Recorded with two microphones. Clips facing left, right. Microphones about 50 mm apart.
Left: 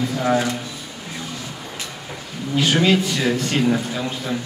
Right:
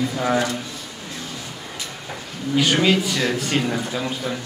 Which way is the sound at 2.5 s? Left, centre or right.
Centre.